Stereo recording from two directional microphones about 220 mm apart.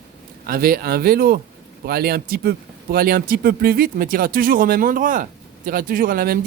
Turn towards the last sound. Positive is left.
turn(degrees=-40)  # may be behind; listen again after turning